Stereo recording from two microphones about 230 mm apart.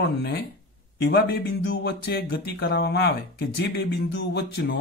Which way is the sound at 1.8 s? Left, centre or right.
Left.